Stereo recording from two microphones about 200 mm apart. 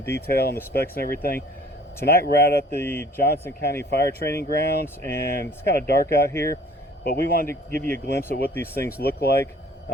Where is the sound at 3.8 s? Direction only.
55° left (ahead or behind).